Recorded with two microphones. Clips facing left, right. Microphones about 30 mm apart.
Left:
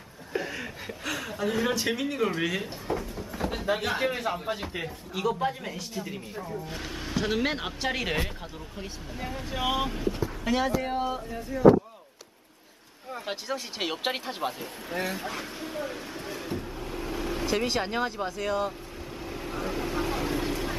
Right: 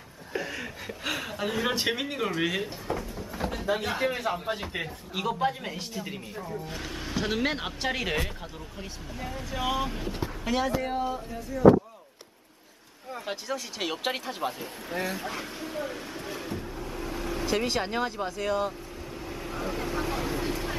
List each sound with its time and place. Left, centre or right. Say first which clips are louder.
0.3 s a sound: left 1 dB; centre
1.0 s a woman's voice: left 1 dB; centre
2.2 s a sound: right 2 dB; centre
3.5 s speech: left 1 dB; centre
6.1 s speech: even; centre
11.0 s speech: left 1 dB; left
13.1 s speech: even; centre
19.2 s vehicle: left 1 dB; centre